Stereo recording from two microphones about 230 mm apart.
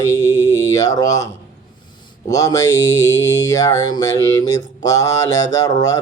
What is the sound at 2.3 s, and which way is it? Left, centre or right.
Mantra, centre.